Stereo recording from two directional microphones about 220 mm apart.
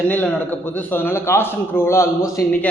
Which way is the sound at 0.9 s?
10° left (ahead or behind).